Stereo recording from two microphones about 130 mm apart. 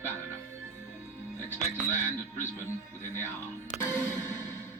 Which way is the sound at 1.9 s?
15° left (ahead or behind).